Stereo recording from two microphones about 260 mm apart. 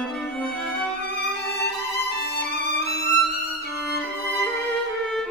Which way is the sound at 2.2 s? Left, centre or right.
Left.